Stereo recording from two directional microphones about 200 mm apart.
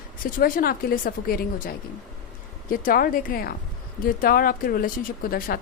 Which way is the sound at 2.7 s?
45° left (ahead or behind).